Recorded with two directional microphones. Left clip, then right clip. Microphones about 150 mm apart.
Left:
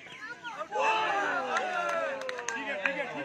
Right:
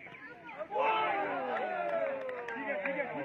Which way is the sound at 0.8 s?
15° left (ahead or behind).